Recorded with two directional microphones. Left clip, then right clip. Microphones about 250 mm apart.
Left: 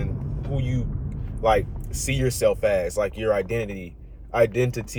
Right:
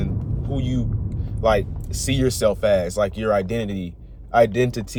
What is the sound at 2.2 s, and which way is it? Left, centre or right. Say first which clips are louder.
Speech: right 2 dB; centre.